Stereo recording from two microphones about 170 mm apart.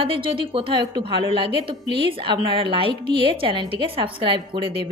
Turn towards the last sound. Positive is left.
turn(degrees=-30)  # may be behind; listen again after turning